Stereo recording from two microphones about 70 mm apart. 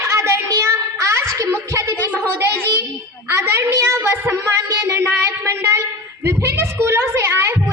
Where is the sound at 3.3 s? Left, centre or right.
Right.